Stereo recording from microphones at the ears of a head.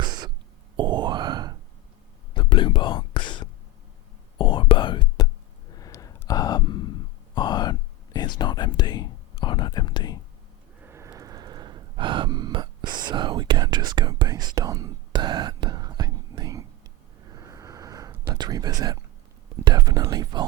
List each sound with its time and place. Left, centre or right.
0.0 s a sound: right
2.3 s whispering: left
5.7 s sigh: left
10.8 s gasp: right
17.2 s a sound: right
19.5 s whispering: right